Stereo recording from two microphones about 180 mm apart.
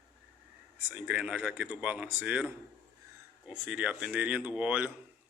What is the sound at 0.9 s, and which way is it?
Speech, 10° right (ahead or behind).